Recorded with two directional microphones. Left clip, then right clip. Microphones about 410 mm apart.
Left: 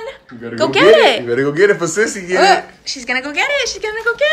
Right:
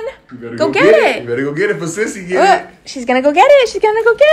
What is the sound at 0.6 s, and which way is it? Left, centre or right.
Speech, centre.